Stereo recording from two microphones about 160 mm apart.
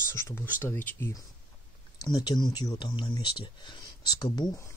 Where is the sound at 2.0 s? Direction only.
25° left (ahead or behind).